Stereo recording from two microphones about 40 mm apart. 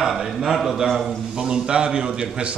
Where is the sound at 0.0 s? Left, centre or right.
Centre.